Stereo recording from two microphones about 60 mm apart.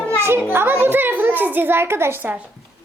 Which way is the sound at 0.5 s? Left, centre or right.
Right.